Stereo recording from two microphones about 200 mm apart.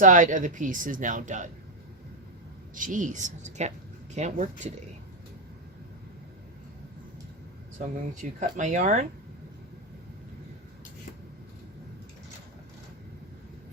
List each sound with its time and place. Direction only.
0.0 s speech: 40° right (ahead or behind)
2.7 s speech: 40° right (ahead or behind)
8.1 s speech: 40° right (ahead or behind)